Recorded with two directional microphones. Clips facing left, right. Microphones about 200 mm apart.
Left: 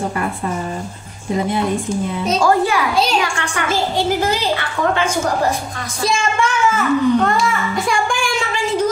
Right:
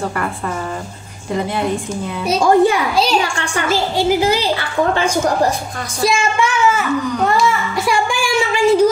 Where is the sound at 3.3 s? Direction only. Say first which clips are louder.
Right 2 dB; 30° right (ahead or behind).